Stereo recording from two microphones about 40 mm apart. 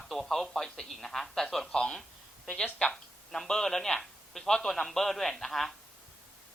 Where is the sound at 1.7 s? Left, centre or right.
Left.